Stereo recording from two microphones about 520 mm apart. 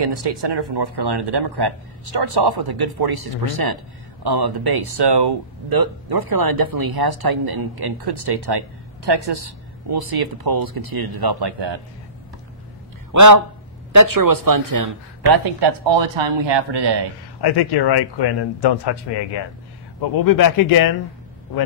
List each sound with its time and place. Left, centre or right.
0.0 s speech: right
13.1 s a man's voice: right
17.4 s speech: left
20.0 s speech: left